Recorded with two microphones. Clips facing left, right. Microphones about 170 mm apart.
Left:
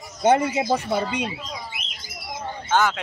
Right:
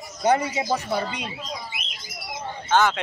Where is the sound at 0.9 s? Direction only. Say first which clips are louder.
Left 3 dB; 20° left (ahead or behind).